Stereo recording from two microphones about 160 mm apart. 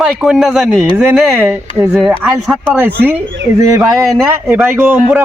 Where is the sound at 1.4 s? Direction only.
10° right (ahead or behind).